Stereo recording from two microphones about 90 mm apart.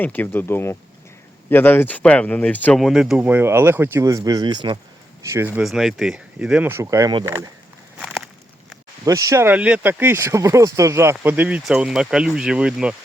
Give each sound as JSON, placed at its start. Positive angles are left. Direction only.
{"t": 0.0, "sound": "speech", "side_deg": 20}
{"t": 2.7, "sound": "speech", "side_deg": -5}
{"t": 3.2, "sound": "speech", "side_deg": -20}
{"t": 4.0, "sound": "speech", "side_deg": -40}
{"t": 5.2, "sound": "speech", "side_deg": -30}
{"t": 5.6, "sound": "speech", "side_deg": -5}
{"t": 6.7, "sound": "speech", "side_deg": -30}
{"t": 9.0, "sound": "speech", "side_deg": -35}
{"t": 9.5, "sound": "speech", "side_deg": -15}
{"t": 11.6, "sound": "speech", "side_deg": -5}